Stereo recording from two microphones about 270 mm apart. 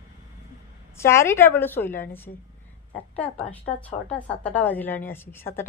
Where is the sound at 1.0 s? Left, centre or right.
Centre.